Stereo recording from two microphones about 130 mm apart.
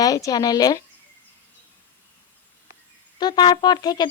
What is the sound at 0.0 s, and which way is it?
Speech, 30° left (ahead or behind).